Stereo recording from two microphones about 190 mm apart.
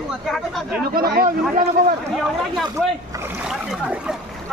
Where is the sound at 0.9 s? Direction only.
50° right (ahead or behind).